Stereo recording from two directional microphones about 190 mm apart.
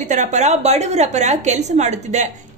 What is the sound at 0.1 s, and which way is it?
A woman's voice, 40° right (ahead or behind).